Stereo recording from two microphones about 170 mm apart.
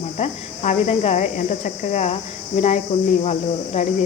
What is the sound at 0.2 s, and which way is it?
Speech, 40° left (ahead or behind).